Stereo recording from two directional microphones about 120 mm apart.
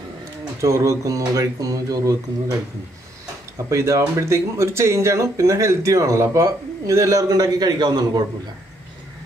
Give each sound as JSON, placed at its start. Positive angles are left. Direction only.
{"t": 0.6, "sound": "speech", "side_deg": -25}
{"t": 3.5, "sound": "speech", "side_deg": -25}